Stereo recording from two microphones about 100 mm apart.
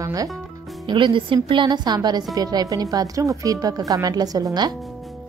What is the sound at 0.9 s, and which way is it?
A woman's voice, 55° right (ahead or behind).